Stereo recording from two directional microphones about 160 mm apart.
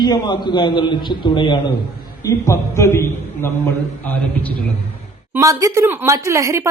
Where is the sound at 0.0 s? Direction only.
25° left (ahead or behind).